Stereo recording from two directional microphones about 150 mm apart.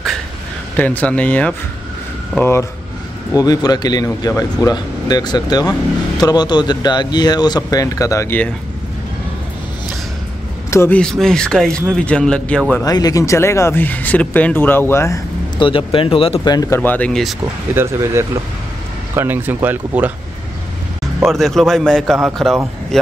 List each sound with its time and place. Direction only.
0.7 s speech: 10° left (ahead or behind)
3.3 s speech: 25° left (ahead or behind)
10.7 s speech: 15° left (ahead or behind)
11.0 s a man's voice: 5° left (ahead or behind)
12.8 s speech: 25° left (ahead or behind)
15.6 s speech: 35° left (ahead or behind)
16.5 s speech: 20° left (ahead or behind); by 17.4 s centre (ahead or behind)
17.7 s speech: 15° right (ahead or behind)
21.2 s a man's voice: centre (ahead or behind)